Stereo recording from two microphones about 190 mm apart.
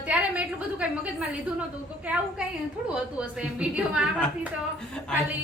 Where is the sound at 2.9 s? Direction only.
5° right (ahead or behind).